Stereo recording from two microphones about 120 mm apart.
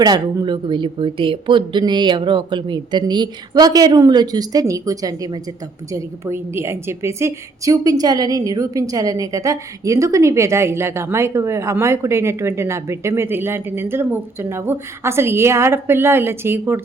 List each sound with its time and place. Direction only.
0.0 s a woman's voice: 35° right (ahead or behind)